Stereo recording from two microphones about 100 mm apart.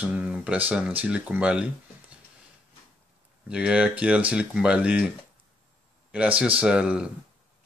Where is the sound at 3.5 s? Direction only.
10° right (ahead or behind).